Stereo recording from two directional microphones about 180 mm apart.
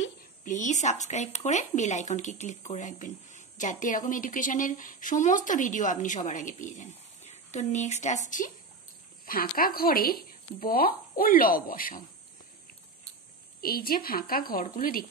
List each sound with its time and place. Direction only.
0.5 s speech: 40° left (ahead or behind)
13.6 s a woman's voice: 55° left (ahead or behind)